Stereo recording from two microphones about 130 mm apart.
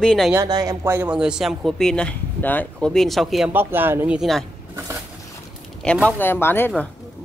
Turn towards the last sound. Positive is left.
turn(degrees=15)  # may be behind; listen again after turning